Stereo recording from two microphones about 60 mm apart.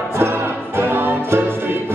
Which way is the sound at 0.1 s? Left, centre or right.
Right.